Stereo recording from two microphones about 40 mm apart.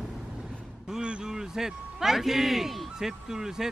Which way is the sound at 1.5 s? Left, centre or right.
Centre.